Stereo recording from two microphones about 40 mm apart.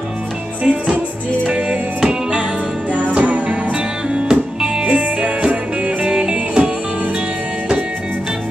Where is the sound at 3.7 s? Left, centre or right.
Right.